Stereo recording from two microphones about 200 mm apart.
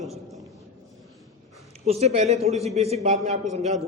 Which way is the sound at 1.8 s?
30° right (ahead or behind).